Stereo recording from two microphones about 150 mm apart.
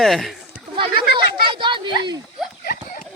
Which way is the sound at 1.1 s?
30° right (ahead or behind).